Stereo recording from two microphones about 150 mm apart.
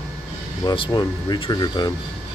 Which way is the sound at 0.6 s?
30° left (ahead or behind).